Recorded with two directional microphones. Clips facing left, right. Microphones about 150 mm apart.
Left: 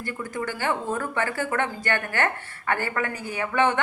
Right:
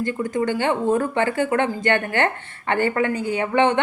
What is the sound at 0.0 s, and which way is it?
A woman's voice, 20° right (ahead or behind).